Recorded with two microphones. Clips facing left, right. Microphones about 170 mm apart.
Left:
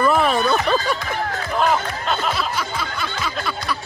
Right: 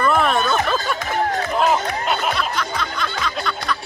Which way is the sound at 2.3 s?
5° left (ahead or behind).